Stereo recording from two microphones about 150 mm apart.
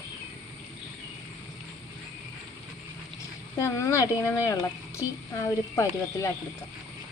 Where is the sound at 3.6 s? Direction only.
20° left (ahead or behind).